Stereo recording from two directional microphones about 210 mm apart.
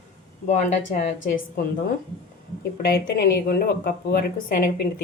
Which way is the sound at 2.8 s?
50° left (ahead or behind).